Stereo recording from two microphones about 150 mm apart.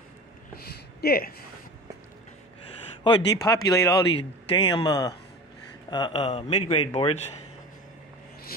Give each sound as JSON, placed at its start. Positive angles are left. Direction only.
{"t": 1.0, "sound": "speech", "side_deg": 80}
{"t": 3.0, "sound": "speech", "side_deg": 30}
{"t": 3.7, "sound": "speech", "side_deg": 20}
{"t": 4.2, "sound": "speech", "side_deg": 30}